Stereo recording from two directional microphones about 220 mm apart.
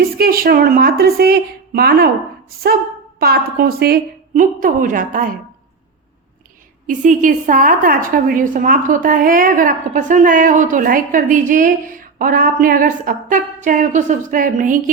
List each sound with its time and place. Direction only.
0.2 s a woman's voice: 40° right (ahead or behind)
3.2 s a woman's voice: 45° right (ahead or behind)
6.8 s a woman's voice: 35° right (ahead or behind)